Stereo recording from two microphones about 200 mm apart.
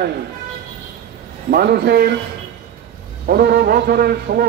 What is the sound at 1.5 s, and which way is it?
Speech, 50° right (ahead or behind).